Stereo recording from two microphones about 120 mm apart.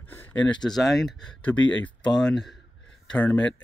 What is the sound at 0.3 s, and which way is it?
Speech, 5° left (ahead or behind).